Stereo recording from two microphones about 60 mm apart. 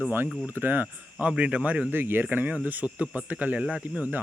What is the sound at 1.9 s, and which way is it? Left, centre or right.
Speech, right.